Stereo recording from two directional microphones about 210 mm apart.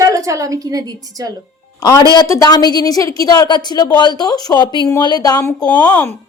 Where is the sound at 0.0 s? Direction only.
15° right (ahead or behind).